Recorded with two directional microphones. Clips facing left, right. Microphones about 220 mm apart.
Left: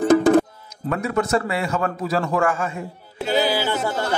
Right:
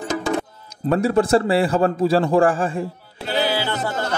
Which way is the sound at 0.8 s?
30° right (ahead or behind).